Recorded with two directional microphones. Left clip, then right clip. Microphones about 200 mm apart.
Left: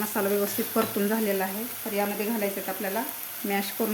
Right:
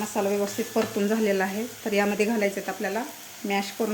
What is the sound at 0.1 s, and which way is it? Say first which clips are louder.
Speech: right 1 dB; 5° left (ahead or behind).